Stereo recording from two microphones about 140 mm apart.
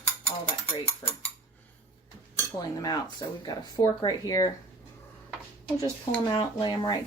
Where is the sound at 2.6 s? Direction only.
25° left (ahead or behind).